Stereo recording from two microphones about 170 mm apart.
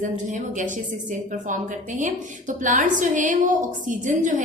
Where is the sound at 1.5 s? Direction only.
50° right (ahead or behind).